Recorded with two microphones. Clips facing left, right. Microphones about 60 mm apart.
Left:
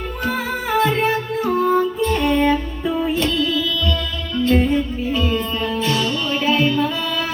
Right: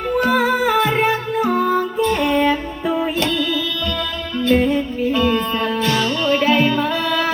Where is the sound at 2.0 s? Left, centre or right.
Right.